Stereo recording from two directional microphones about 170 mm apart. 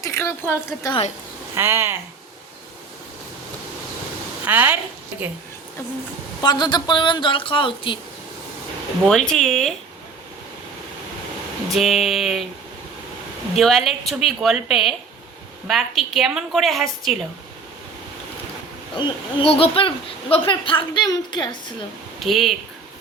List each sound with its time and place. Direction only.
0.0 s a woman's voice: 15° left (ahead or behind)
1.5 s speech: 15° right (ahead or behind)
4.4 s speech: 10° right (ahead or behind)
6.4 s speech: 25° left (ahead or behind)
9.0 s a woman's voice: 5° left (ahead or behind)
11.7 s a woman's voice: centre (ahead or behind)
13.6 s a woman's voice: centre (ahead or behind)
18.9 s speech: 30° left (ahead or behind)
22.2 s a woman's voice: centre (ahead or behind)